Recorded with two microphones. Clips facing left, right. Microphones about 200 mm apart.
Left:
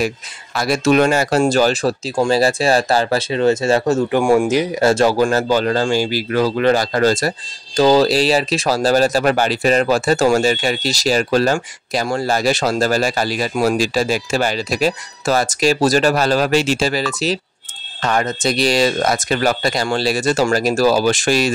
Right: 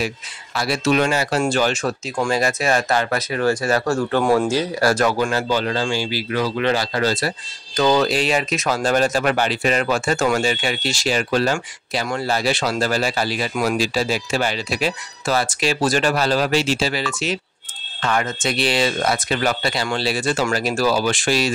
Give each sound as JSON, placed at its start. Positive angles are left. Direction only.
{"t": 0.6, "sound": "speech", "side_deg": 45}
{"t": 5.3, "sound": "speech", "side_deg": 45}
{"t": 7.7, "sound": "speech", "side_deg": 30}